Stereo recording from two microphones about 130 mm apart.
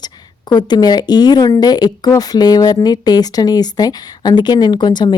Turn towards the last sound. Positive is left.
turn(degrees=35)  # may be behind; listen again after turning